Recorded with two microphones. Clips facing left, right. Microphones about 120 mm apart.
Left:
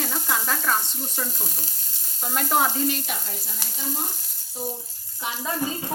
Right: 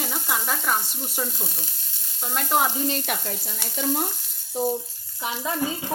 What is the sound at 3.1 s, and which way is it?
Frying, 60° right (ahead or behind).